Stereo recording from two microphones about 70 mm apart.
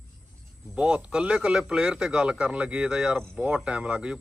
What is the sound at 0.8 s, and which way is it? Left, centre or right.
Speech, centre.